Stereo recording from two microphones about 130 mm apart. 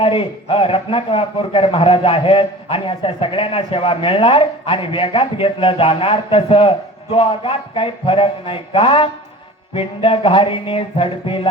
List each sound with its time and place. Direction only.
0.0 s a man's voice: 45° left (ahead or behind)